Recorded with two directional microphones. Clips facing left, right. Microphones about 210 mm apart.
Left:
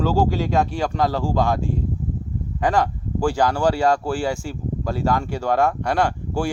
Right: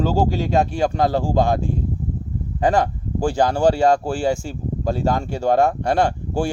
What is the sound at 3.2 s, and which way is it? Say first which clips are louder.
Speech: right 1 dB; 25° right (ahead or behind).